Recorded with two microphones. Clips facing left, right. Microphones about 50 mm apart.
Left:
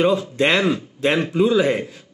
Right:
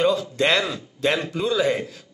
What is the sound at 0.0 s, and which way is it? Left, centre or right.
Speech, left.